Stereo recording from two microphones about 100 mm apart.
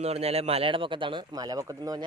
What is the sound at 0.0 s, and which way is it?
Speech, 90° right.